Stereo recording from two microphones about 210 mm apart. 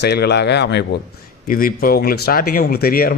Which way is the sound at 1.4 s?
40° left (ahead or behind).